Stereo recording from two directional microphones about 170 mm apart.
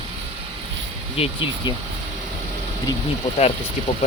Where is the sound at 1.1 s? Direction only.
30° left (ahead or behind).